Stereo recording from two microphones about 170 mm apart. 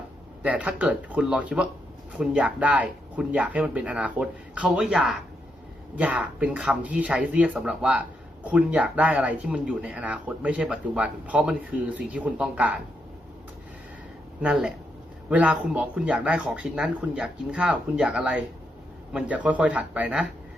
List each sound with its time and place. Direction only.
0.4 s speech: 10° right (ahead or behind)
14.4 s speech: 5° right (ahead or behind)